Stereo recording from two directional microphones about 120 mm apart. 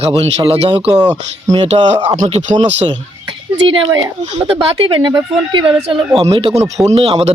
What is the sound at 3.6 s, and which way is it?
Speech, 45° right (ahead or behind).